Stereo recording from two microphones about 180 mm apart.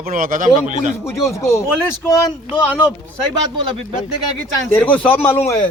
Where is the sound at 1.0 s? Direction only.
15° left (ahead or behind).